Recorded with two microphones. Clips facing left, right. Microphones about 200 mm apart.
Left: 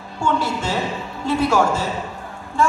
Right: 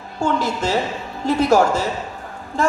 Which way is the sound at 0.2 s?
40° right (ahead or behind).